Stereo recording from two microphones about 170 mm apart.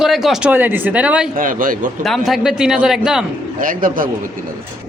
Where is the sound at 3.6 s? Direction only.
55° right (ahead or behind).